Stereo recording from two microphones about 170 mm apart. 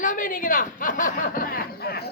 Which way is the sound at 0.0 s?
50° left (ahead or behind).